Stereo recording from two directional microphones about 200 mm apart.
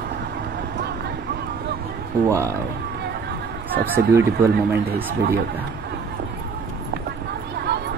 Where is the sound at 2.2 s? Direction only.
15° right (ahead or behind).